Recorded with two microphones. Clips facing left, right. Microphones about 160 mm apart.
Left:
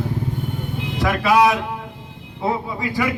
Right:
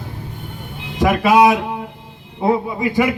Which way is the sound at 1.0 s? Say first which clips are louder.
Right 4 dB; 20° right (ahead or behind).